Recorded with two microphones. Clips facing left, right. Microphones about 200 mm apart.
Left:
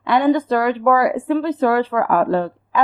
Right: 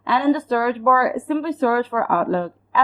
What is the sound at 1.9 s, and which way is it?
Speech, 60° left (ahead or behind).